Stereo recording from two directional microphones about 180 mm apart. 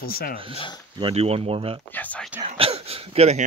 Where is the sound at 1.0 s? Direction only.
35° right (ahead or behind).